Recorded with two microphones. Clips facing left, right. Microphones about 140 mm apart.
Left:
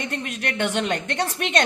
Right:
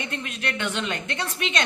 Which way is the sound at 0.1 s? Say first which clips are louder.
Left 2 dB; 40° left (ahead or behind).